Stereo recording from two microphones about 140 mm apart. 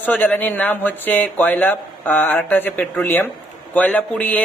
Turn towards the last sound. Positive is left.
turn(degrees=10)  # may be behind; listen again after turning